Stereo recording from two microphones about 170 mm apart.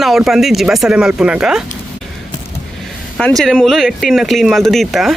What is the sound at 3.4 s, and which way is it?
Speech, 5° left (ahead or behind).